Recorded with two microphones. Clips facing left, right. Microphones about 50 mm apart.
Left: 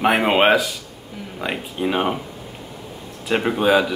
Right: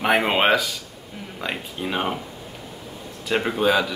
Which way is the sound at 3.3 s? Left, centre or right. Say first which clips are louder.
Left 3 dB; centre.